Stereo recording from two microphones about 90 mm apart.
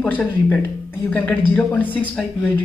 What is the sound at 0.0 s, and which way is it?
Speech, 15° left (ahead or behind).